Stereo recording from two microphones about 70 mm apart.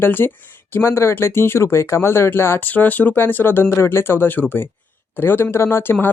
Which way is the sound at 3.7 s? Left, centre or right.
Left.